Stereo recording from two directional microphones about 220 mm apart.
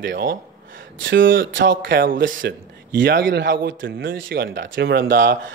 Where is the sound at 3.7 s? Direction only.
60° right (ahead or behind); by 5.3 s 40° right (ahead or behind).